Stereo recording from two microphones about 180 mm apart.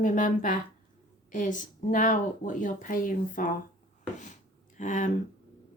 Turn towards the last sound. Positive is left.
turn(degrees=45)  # may be behind; listen again after turning